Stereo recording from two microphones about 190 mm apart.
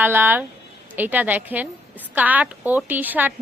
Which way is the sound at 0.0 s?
10° right (ahead or behind).